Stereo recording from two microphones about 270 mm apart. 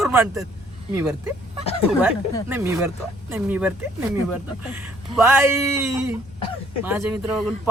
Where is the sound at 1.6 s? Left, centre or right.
Left.